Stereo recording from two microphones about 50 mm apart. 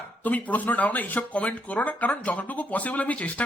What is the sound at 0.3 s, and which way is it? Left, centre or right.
Speech, left.